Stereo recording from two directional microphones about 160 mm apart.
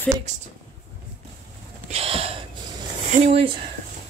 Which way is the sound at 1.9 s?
40° right (ahead or behind).